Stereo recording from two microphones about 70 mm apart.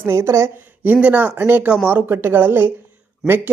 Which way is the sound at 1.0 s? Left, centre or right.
Right.